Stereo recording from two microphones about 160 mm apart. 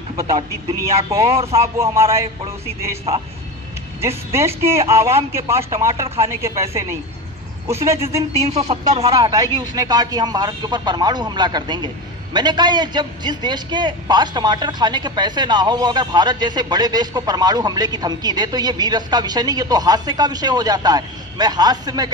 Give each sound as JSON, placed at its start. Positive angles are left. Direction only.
{"t": 0.4, "sound": "speech", "side_deg": -40}
{"t": 1.8, "sound": "speech", "side_deg": -20}
{"t": 4.6, "sound": "speech", "side_deg": -15}
{"t": 7.6, "sound": "a man's voice", "side_deg": -20}
{"t": 8.4, "sound": "speech", "side_deg": -45}
{"t": 9.0, "sound": "a man's voice", "side_deg": -25}